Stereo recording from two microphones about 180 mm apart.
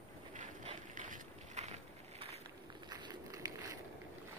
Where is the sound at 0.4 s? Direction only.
45° right (ahead or behind).